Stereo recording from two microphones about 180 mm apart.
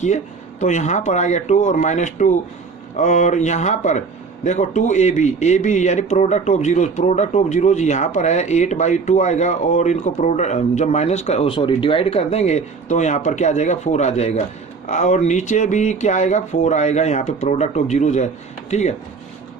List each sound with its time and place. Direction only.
0.6 s speech: 40° left (ahead or behind)